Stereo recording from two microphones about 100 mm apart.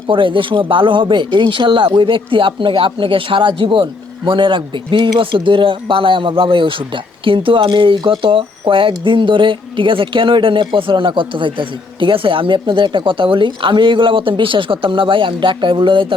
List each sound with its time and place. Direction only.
0.1 s speech: 60° right (ahead or behind)